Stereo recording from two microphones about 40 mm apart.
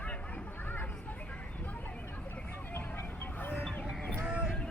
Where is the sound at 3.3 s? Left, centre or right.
Left.